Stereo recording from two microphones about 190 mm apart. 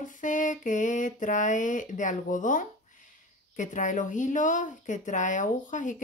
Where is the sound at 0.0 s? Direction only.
40° left (ahead or behind).